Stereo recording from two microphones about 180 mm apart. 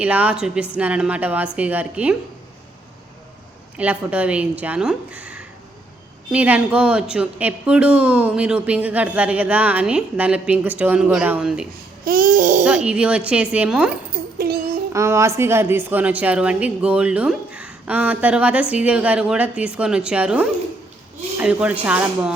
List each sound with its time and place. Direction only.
0.0 s speech: 10° right (ahead or behind)
3.8 s speech: 10° right (ahead or behind)
12.0 s babbling: 50° right (ahead or behind)
12.6 s speech: 5° right (ahead or behind)
14.3 s a sound: 60° right (ahead or behind)
14.9 s speech: 15° right (ahead or behind)